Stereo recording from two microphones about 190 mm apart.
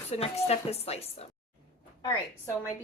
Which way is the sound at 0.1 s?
35° left (ahead or behind).